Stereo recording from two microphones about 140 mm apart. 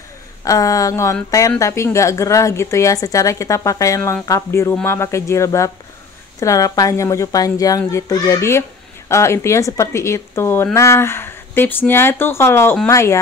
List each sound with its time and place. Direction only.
0.4 s speech: 25° left (ahead or behind)